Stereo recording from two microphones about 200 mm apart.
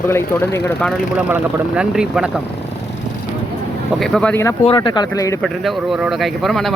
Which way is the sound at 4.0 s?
5° left (ahead or behind).